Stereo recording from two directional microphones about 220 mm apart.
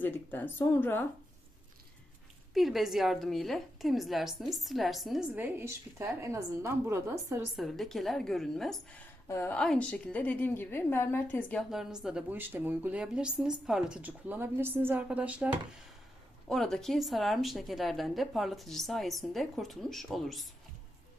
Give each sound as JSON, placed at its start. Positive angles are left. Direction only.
{"t": 0.0, "sound": "speech", "side_deg": 10}
{"t": 2.6, "sound": "a woman's voice", "side_deg": 0}
{"t": 7.6, "sound": "a woman's voice", "side_deg": 0}
{"t": 16.5, "sound": "a woman's voice", "side_deg": 0}